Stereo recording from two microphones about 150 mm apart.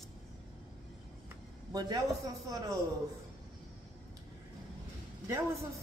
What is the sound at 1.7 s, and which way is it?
Speech, 25° right (ahead or behind).